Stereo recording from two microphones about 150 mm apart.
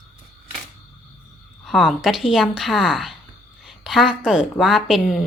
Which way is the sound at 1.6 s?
Centre (ahead or behind).